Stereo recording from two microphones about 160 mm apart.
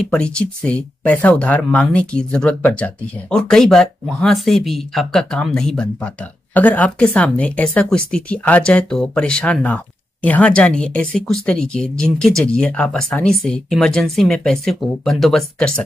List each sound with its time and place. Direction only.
0.1 s speech: 5° left (ahead or behind)